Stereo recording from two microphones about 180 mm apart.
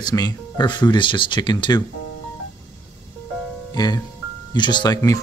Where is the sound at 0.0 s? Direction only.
20° left (ahead or behind).